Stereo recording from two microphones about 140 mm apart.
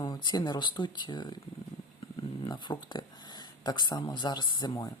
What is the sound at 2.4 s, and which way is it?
Speech, 35° left (ahead or behind).